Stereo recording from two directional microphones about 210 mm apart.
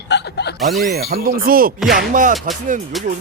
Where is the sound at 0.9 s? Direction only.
45° right (ahead or behind).